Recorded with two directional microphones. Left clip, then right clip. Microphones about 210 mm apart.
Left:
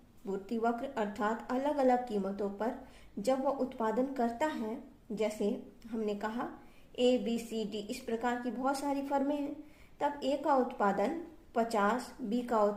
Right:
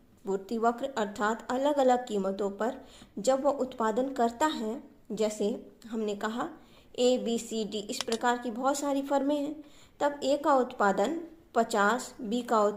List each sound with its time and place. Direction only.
0.3 s a woman's voice: 25° right (ahead or behind)
10.2 s speech: 30° right (ahead or behind)